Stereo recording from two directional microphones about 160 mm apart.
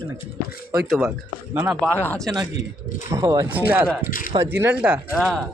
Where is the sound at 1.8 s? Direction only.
10° left (ahead or behind).